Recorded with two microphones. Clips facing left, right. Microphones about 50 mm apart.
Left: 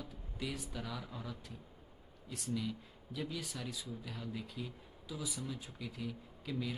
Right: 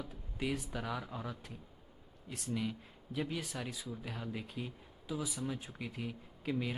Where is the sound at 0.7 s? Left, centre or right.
Right.